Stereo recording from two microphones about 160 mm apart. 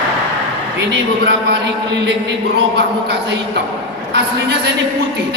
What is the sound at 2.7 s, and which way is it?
Speech, 90° right.